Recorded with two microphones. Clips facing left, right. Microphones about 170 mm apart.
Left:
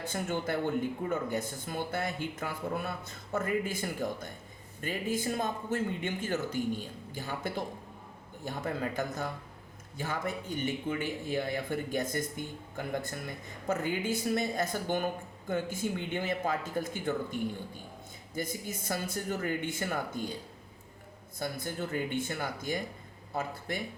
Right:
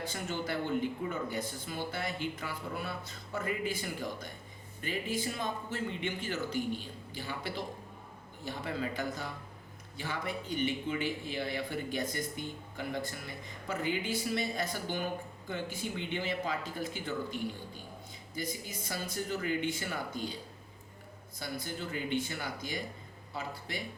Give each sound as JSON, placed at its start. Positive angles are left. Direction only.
{"t": 0.0, "sound": "speech", "side_deg": 50}
{"t": 18.3, "sound": "speech", "side_deg": 50}
{"t": 21.3, "sound": "speech", "side_deg": 50}